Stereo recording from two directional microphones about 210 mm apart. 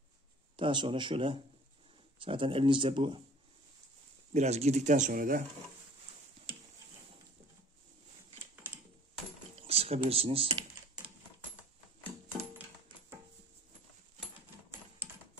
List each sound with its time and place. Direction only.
0.6 s speech: 25° right (ahead or behind)
4.3 s speech: 30° right (ahead or behind)
9.6 s speech: 30° right (ahead or behind)